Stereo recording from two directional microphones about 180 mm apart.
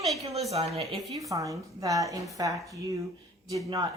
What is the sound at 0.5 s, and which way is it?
Speech, 35° right (ahead or behind).